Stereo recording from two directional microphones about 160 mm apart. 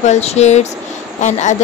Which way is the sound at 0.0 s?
45° left (ahead or behind).